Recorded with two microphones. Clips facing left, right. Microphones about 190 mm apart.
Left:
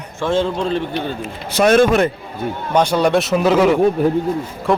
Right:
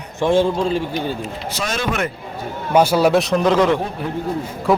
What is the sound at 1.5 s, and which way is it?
Speech, 60° left (ahead or behind).